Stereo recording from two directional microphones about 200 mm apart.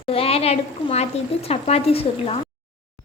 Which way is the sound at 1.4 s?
30° left (ahead or behind).